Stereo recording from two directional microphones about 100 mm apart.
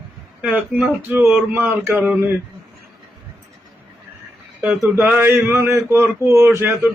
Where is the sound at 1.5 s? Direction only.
25° right (ahead or behind).